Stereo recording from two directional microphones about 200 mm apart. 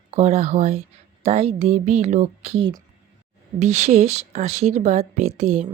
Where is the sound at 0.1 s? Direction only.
30° right (ahead or behind).